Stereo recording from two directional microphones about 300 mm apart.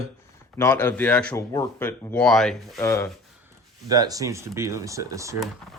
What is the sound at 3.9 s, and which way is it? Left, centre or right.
Speech, centre.